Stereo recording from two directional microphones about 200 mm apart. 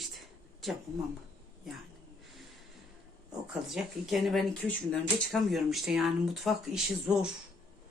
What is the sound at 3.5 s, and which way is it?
Speech, centre (ahead or behind).